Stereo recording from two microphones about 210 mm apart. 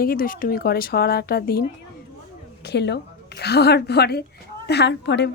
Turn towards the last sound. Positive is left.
turn(degrees=55)  # may be behind; listen again after turning